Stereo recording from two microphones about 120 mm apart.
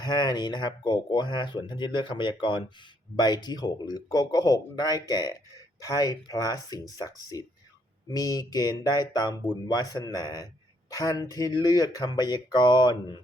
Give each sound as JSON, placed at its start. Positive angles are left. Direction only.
{"t": 0.0, "sound": "speech", "side_deg": 35}